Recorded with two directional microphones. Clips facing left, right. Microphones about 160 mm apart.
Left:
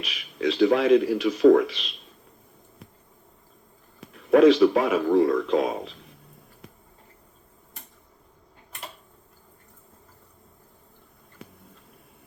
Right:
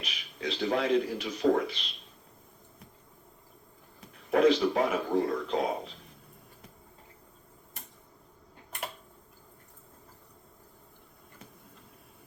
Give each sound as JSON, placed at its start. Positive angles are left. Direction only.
{"t": 0.0, "sound": "speech", "side_deg": 90}
{"t": 4.0, "sound": "speech", "side_deg": 90}